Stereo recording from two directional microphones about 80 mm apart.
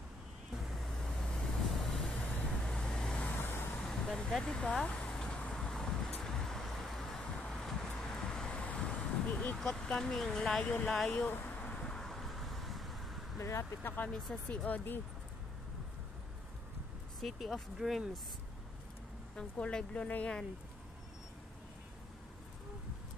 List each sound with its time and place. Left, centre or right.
0.7 s vehicle: centre
3.3 s vehicle: left
3.8 s vehicle: centre
9.6 s speech: centre
10.6 s speech: centre
11.4 s vehicle: centre
13.4 s speech: left
14.1 s speech: centre
17.2 s speech: centre
19.3 s speech: centre